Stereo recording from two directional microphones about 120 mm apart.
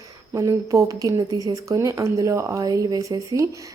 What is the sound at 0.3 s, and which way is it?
A woman's voice, 25° right (ahead or behind).